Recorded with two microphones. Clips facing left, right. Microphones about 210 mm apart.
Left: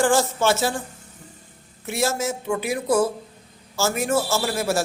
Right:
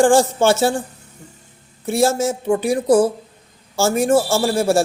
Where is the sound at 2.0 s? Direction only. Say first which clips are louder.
Right 6 dB; 30° right (ahead or behind).